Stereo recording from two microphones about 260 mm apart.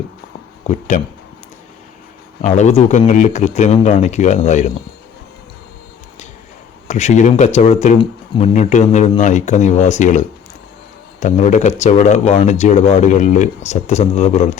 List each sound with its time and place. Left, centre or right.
0.7 s speech: left
2.4 s speech: left
6.8 s speech: left